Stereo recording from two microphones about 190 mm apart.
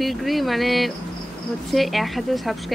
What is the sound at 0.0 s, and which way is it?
A woman's voice, centre (ahead or behind).